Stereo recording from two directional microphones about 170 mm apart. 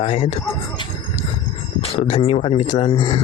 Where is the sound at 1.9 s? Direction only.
35° left (ahead or behind).